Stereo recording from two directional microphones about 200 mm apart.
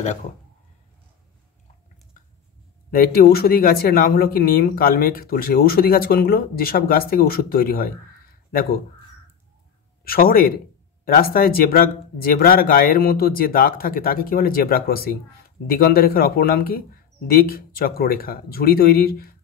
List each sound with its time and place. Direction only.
0.0 s speech: 35° left (ahead or behind)
2.9 s speech: 45° left (ahead or behind)
10.0 s speech: 50° left (ahead or behind)